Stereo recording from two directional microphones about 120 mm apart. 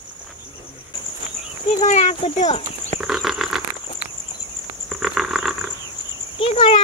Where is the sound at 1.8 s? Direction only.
80° left.